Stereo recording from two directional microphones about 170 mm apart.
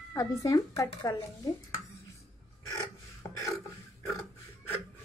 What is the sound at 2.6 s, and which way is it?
Filing, 20° left (ahead or behind).